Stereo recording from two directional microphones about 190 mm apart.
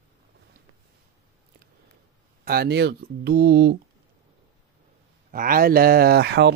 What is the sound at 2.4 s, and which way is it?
Speech, 55° right (ahead or behind).